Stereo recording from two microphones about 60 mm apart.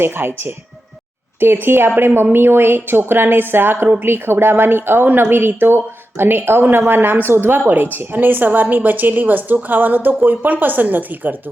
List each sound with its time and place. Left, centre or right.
0.0 s a woman's voice: right
1.6 s a woman's voice: right